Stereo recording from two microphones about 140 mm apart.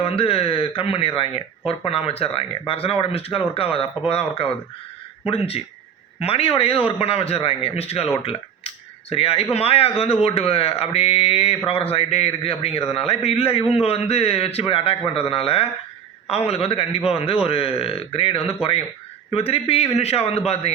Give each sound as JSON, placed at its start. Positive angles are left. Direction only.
{"t": 0.0, "sound": "speech", "side_deg": 45}